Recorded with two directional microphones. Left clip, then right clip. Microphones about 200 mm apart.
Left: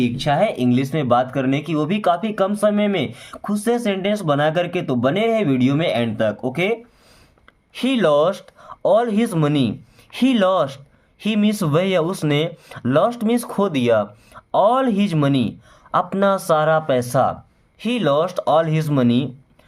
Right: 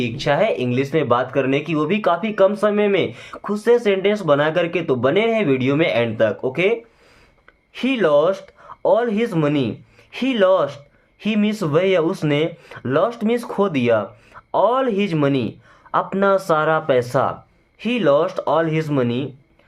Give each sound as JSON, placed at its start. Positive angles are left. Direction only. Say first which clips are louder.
{"t": 0.0, "sound": "speech", "louder": "even", "side_deg": 30}